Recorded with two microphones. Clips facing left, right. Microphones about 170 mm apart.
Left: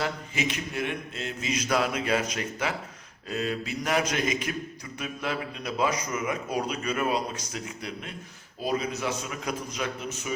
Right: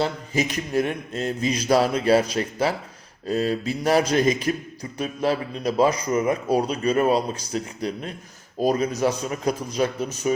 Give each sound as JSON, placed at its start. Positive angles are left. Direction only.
{"t": 0.0, "sound": "a man's voice", "side_deg": -40}